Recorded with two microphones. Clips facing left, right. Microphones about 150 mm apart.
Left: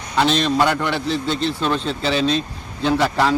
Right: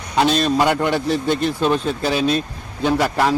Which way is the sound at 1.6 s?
10° right (ahead or behind).